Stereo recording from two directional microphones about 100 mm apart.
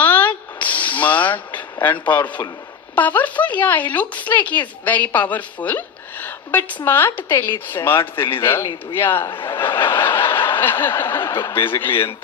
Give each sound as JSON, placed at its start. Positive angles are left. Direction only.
{"t": 0.0, "sound": "a sound", "side_deg": 15}
{"t": 0.6, "sound": "vehicle", "side_deg": 15}
{"t": 2.9, "sound": "speech", "side_deg": 15}
{"t": 9.5, "sound": "snicker", "side_deg": 25}
{"t": 11.4, "sound": "speech", "side_deg": 25}